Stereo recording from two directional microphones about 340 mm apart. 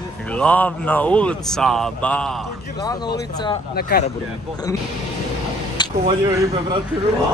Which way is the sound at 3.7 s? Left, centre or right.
Left.